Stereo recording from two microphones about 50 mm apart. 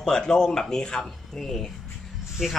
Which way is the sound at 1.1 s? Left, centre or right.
Centre.